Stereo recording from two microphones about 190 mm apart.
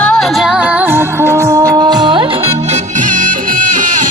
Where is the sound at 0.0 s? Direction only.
5° left (ahead or behind).